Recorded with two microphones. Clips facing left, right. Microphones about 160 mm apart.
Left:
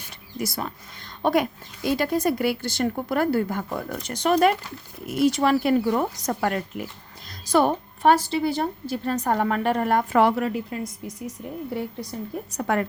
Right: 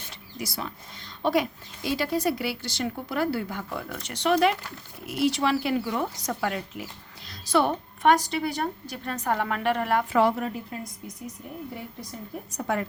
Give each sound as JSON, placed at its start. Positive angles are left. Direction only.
{"t": 0.3, "sound": "a woman's voice", "side_deg": 45}
{"t": 10.2, "sound": "a woman's voice", "side_deg": 75}
{"t": 12.5, "sound": "a woman's voice", "side_deg": 65}